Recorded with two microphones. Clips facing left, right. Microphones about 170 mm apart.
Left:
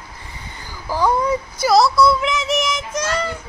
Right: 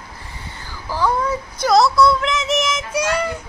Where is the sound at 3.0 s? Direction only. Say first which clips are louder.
Right 2 dB; 15° right (ahead or behind).